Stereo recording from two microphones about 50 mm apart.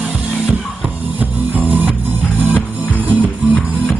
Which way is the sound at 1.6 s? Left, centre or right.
Right.